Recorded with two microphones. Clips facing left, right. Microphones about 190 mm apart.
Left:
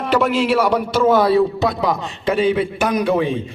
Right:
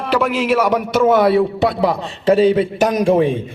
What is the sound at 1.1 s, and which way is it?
A man's voice, 25° right (ahead or behind).